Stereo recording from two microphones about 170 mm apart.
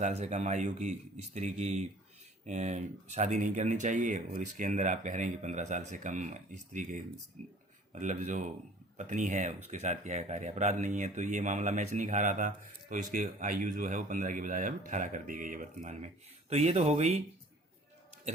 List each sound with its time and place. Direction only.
0.0 s speech: 45° right (ahead or behind)